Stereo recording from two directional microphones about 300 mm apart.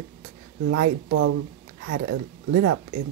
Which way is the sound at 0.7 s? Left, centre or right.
Right.